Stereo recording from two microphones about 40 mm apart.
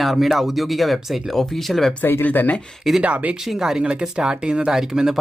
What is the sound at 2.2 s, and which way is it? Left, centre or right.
Speech, left.